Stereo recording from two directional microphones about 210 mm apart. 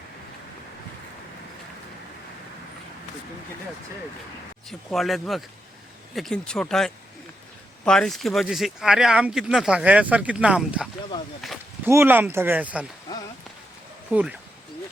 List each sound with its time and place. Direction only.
4.7 s speech: centre (ahead or behind)
11.9 s speech: 10° right (ahead or behind)
14.1 s speech: 5° right (ahead or behind)